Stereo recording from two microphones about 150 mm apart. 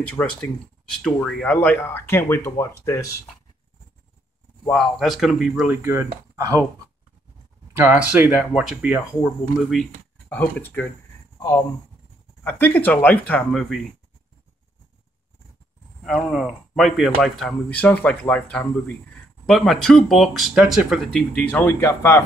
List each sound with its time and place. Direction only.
0.1 s speech: 5° left (ahead or behind)
4.6 s speech: centre (ahead or behind)
5.8 s speech: 15° right (ahead or behind)
8.1 s speech: 10° right (ahead or behind)
10.3 s speech: 15° left (ahead or behind)
12.4 s speech: 10° left (ahead or behind)
13.5 s speech: centre (ahead or behind)
16.0 s speech: centre (ahead or behind)
21.5 s speech: 15° left (ahead or behind)